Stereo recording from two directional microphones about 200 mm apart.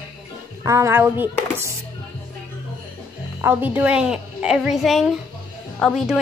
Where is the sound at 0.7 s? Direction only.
15° right (ahead or behind).